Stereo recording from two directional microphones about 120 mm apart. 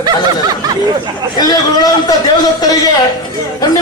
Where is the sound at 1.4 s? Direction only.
30° left (ahead or behind).